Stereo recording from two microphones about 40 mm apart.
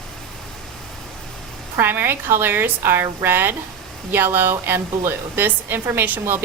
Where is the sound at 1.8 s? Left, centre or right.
Right.